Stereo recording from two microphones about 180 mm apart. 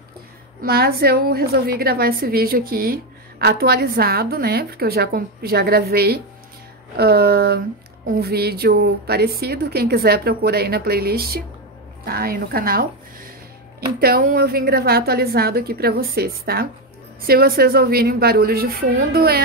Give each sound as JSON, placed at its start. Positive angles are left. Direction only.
{"t": 0.6, "sound": "a woman's voice", "side_deg": -60}